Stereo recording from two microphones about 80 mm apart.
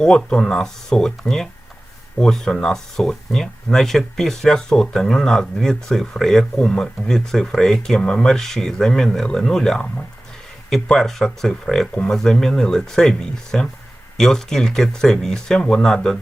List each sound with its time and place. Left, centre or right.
0.0 s speech: centre